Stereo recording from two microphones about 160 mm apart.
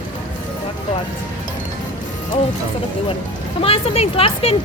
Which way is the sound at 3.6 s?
40° left (ahead or behind).